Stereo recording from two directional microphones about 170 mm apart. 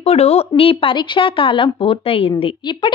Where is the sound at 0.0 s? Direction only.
40° left (ahead or behind).